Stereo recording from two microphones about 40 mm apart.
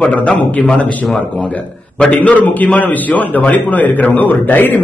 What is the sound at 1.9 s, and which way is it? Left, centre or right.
Speech, left.